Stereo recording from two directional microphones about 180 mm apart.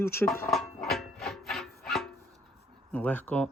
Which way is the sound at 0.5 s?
Centre (ahead or behind).